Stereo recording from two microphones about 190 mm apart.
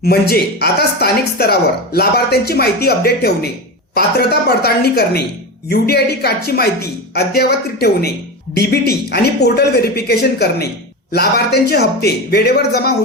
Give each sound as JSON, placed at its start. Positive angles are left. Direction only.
{"t": 0.0, "sound": "speech", "side_deg": 55}